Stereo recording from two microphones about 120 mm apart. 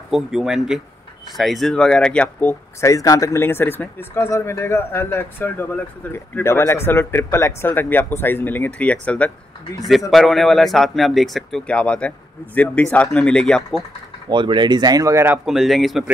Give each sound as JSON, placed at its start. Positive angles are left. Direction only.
{"t": 0.1, "sound": "speech", "side_deg": -5}
{"t": 2.8, "sound": "a man's voice", "side_deg": 25}
{"t": 14.3, "sound": "speech", "side_deg": -40}
{"t": 15.4, "sound": "speech", "side_deg": 0}